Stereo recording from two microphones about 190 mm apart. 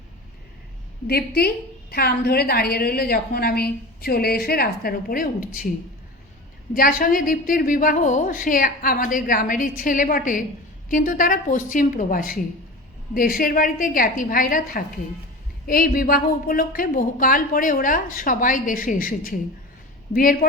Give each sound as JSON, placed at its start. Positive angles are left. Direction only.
{"t": 1.0, "sound": "a woman's voice", "side_deg": 55}
{"t": 6.7, "sound": "a woman's voice", "side_deg": 45}